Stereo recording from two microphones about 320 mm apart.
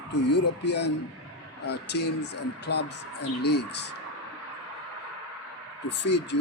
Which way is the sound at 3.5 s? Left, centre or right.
Left.